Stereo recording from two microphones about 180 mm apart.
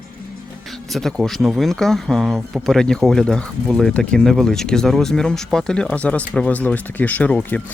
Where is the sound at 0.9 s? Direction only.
Centre (ahead or behind).